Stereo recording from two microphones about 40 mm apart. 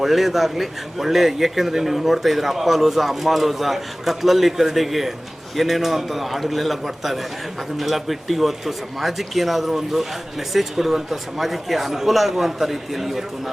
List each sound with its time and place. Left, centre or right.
0.0 s speech: centre